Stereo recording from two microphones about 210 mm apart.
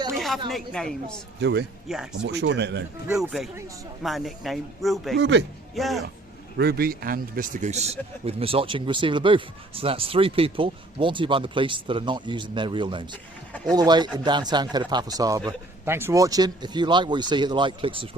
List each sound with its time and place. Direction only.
0.2 s a woman's voice: centre (ahead or behind)
1.4 s speech: 55° right (ahead or behind)
1.9 s speech: centre (ahead or behind)
2.2 s speech: 60° right (ahead or behind)
3.1 s speech: centre (ahead or behind)
5.1 s speech: 55° right (ahead or behind)
5.7 s speech: centre (ahead or behind)
6.6 s speech: 45° right (ahead or behind); by 18.2 s 25° right (ahead or behind)